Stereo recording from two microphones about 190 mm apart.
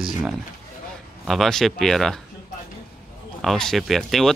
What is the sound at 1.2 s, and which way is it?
Speech, centre (ahead or behind).